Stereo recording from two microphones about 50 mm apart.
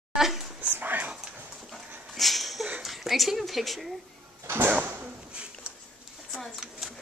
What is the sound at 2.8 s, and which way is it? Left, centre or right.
A woman's voice, centre.